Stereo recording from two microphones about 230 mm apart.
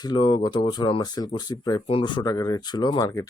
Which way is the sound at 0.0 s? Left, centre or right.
Centre.